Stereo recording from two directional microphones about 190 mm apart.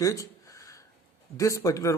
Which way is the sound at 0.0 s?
15° left (ahead or behind).